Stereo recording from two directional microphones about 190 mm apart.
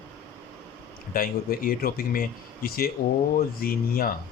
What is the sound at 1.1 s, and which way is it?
A man's voice, 50° left (ahead or behind).